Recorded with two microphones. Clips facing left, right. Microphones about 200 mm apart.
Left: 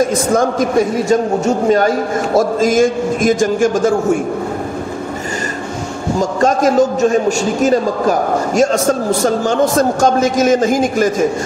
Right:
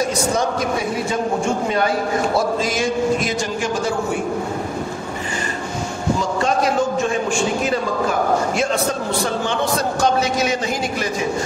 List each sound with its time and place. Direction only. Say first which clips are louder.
0.0 s a man's voice: left 6 dB; 50° left (ahead or behind)
6.1 s a man's voice: left 8 dB; 45° left (ahead or behind)